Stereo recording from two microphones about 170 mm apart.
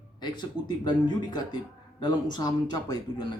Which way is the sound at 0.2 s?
25° left (ahead or behind).